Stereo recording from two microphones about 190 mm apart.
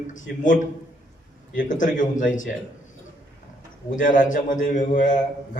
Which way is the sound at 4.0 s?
45° left (ahead or behind).